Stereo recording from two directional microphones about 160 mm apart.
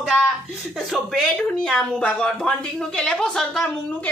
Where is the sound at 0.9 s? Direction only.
Centre (ahead or behind).